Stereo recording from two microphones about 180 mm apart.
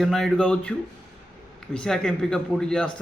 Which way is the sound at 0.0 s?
Centre (ahead or behind).